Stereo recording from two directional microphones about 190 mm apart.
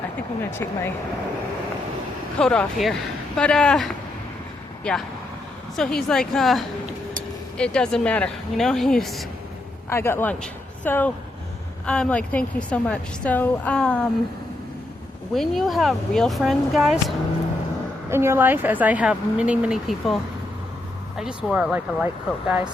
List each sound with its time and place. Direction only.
0.5 s a woman's voice: 15° left (ahead or behind)
2.4 s speech: 5° left (ahead or behind)
9.9 s a woman's voice: 10° left (ahead or behind)
15.3 s speech: centre (ahead or behind)
18.1 s speech: 15° right (ahead or behind)
21.2 s speech: 5° right (ahead or behind)